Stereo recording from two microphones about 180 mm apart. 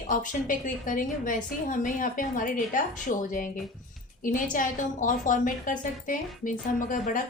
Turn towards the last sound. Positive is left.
turn(degrees=45)  # may be behind; listen again after turning